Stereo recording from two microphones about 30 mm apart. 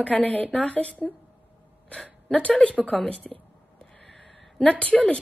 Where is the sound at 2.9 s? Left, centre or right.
Centre.